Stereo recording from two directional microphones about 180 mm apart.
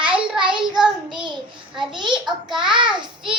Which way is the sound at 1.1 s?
25° right (ahead or behind).